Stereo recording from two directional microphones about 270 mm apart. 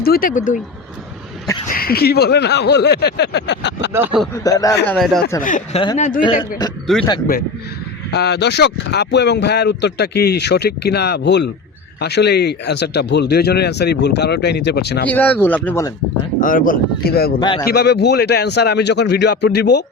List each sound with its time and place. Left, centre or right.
0.0 s speech: left
1.7 s speech: left
3.9 s speech: centre
4.4 s speech: centre
4.9 s speech: centre
5.4 s speech: left
6.8 s speech: centre
8.1 s speech: left
15.0 s speech: centre
16.4 s speech: left
17.4 s speech: centre
17.7 s speech: left